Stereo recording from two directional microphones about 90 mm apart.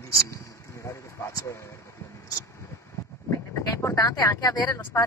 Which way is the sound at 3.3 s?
35° left (ahead or behind).